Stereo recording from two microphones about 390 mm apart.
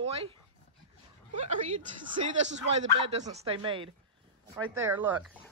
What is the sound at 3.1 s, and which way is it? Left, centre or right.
A woman's voice, centre.